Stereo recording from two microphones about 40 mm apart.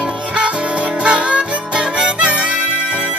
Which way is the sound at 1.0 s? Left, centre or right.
Right.